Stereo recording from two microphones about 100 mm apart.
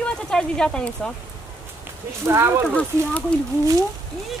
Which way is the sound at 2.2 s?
25° right (ahead or behind).